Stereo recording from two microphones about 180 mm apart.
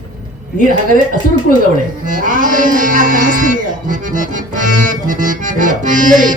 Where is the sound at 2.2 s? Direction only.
45° right (ahead or behind).